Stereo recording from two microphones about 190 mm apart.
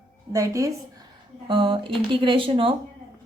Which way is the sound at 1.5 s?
25° right (ahead or behind).